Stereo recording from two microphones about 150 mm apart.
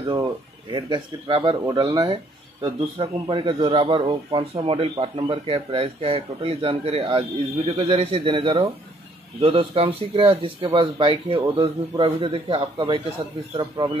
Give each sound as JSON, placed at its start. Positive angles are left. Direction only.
{"t": 0.2, "sound": "a man's voice", "side_deg": -30}